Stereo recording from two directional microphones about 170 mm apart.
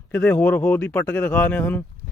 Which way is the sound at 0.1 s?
10° left (ahead or behind).